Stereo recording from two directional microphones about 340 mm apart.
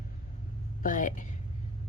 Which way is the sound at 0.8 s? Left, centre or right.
Left.